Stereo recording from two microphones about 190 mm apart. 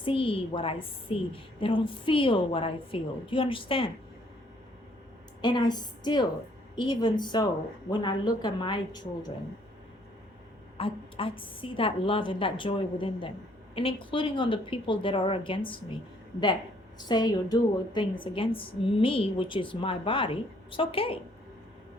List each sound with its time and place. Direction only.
0.0 s a woman's voice: 25° left (ahead or behind)
5.4 s a woman's voice: 25° left (ahead or behind)
10.8 s a woman's voice: 30° left (ahead or behind)
17.0 s a woman's voice: 20° left (ahead or behind)